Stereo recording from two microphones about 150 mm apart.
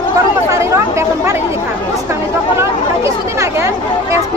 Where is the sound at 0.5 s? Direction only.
20° right (ahead or behind).